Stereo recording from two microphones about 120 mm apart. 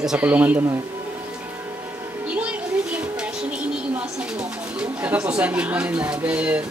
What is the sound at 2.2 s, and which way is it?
Music, 10° right (ahead or behind).